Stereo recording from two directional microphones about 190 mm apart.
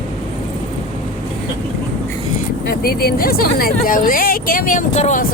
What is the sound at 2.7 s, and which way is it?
Speech, 55° left (ahead or behind).